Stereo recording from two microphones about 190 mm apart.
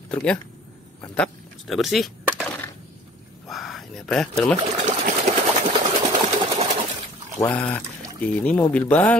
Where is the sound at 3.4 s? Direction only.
Centre (ahead or behind).